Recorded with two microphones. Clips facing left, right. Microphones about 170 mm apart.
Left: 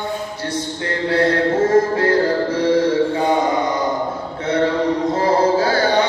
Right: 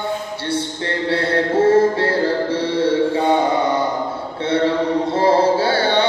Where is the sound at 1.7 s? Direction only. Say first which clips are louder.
Right 1 dB; 30° right (ahead or behind).